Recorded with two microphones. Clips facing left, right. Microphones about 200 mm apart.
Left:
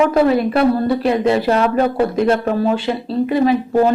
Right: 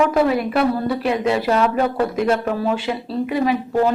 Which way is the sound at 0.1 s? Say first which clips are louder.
Left 4 dB; 30° left (ahead or behind).